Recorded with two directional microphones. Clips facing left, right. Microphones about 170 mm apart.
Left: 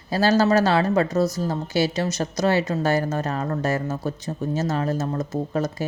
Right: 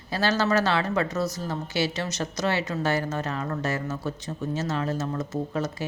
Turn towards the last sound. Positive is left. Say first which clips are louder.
# left 4 dB
turn(degrees=40)  # may be behind; listen again after turning